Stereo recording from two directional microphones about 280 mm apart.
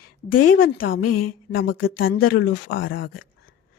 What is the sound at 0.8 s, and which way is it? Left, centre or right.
Speech, left.